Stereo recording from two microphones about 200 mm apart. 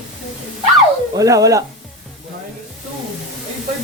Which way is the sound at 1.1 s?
15° right (ahead or behind).